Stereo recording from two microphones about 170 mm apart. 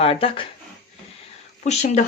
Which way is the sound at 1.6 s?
40° left (ahead or behind).